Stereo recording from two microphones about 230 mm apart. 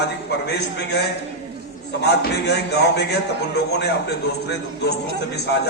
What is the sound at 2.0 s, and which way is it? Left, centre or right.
A man's voice, left.